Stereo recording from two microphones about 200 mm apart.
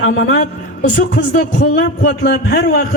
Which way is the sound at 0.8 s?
55° left (ahead or behind).